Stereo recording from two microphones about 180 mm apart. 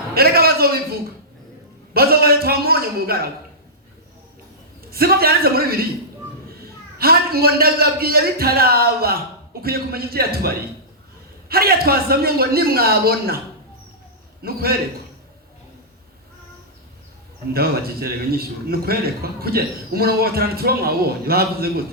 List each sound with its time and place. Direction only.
0.1 s a man's voice: 60° right (ahead or behind)
1.9 s a sound: 55° right (ahead or behind)
4.9 s a man's voice: 60° right (ahead or behind)
7.0 s a man's voice: 55° right (ahead or behind)
14.4 s a man's voice: 55° right (ahead or behind)
17.5 s a man's voice: 55° right (ahead or behind)